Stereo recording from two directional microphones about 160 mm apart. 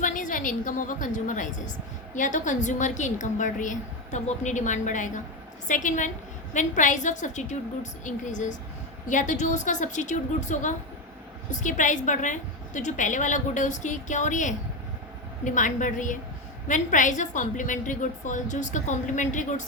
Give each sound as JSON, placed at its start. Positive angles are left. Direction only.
{"t": 0.0, "sound": "a woman's voice", "side_deg": 55}